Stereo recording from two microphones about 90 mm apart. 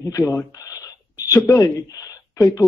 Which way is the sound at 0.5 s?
40° left (ahead or behind).